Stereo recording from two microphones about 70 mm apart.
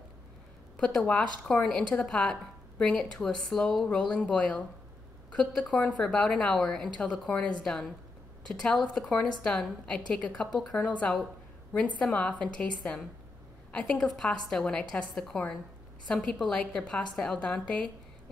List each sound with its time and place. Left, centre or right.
0.7 s speech: centre
6.5 s a woman's voice: centre
7.0 s speech: centre
10.8 s a woman's voice: centre